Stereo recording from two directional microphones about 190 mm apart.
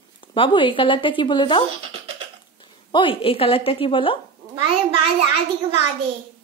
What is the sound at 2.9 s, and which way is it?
Speech, 25° left (ahead or behind).